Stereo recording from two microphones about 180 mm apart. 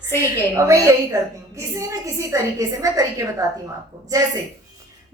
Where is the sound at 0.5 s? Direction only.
15° right (ahead or behind).